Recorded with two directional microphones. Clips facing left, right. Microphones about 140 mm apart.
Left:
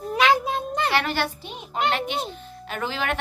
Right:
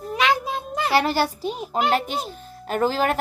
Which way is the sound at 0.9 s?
40° right (ahead or behind).